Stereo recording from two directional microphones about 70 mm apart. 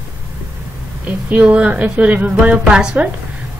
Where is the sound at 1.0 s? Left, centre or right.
Centre.